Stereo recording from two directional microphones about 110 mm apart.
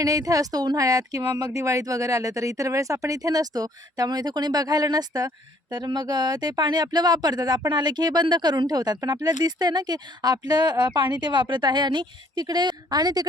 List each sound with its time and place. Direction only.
0.0 s speech: 30° right (ahead or behind)